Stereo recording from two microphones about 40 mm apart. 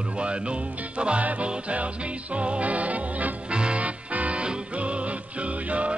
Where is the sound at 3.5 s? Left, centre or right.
Right.